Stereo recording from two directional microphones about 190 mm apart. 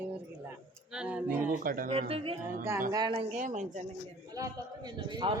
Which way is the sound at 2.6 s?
15° right (ahead or behind).